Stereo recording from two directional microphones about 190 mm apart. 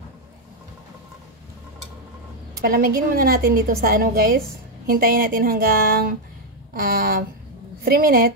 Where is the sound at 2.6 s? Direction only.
50° right (ahead or behind).